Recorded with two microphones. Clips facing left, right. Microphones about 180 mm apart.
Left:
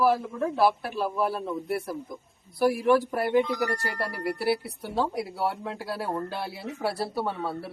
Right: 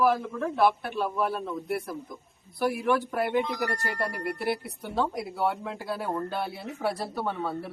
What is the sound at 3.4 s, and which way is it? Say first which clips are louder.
Speech: left 6 dB; 40° left (ahead or behind).